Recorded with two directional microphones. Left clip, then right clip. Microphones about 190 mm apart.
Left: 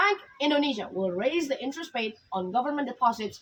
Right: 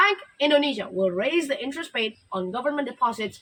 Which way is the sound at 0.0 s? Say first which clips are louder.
Right 4 dB; 15° right (ahead or behind).